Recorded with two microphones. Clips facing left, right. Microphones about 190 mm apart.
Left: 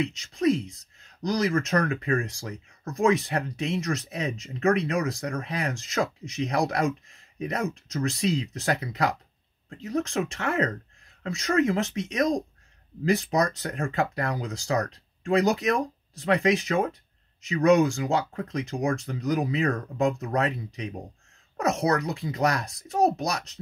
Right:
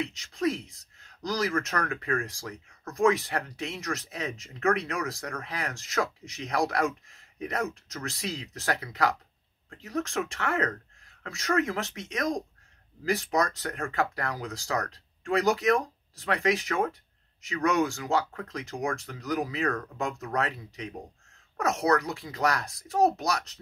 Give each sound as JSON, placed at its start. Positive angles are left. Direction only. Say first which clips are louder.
{"t": 0.9, "sound": "speech", "louder": "left 4 dB", "side_deg": 20}
{"t": 13.4, "sound": "speech", "louder": "left 3 dB", "side_deg": 20}